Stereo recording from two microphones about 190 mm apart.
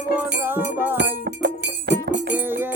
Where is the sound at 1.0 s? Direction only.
65° right (ahead or behind).